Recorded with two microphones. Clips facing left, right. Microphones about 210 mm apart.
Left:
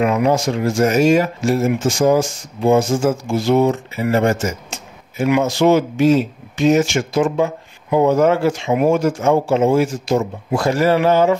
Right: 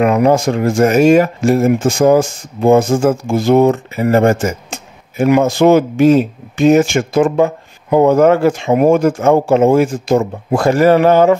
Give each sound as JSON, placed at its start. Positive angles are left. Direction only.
{"t": 0.0, "sound": "speech", "side_deg": -55}